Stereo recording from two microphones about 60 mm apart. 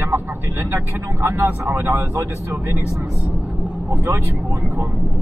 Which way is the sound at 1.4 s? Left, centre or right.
Right.